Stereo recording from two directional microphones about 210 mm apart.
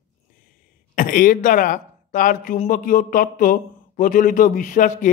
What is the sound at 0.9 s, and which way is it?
Speech, 40° left (ahead or behind).